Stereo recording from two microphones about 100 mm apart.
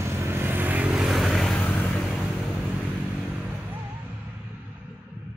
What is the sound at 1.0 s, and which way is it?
Vehicle, centre (ahead or behind).